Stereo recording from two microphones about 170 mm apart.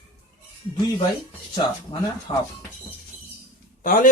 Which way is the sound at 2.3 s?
35° left (ahead or behind).